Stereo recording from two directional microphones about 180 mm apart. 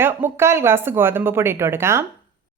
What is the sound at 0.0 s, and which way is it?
Speech, 15° right (ahead or behind).